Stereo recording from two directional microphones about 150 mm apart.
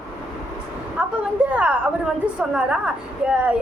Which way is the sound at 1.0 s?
10° right (ahead or behind).